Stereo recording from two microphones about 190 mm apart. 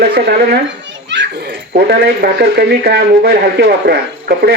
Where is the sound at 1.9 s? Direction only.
55° right (ahead or behind).